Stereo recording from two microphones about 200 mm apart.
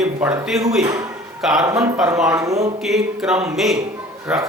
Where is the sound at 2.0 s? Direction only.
5° right (ahead or behind).